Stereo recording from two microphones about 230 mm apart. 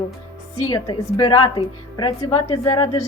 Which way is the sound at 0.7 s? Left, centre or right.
Centre.